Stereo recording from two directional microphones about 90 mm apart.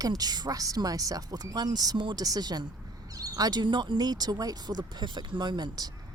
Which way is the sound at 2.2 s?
45° right (ahead or behind).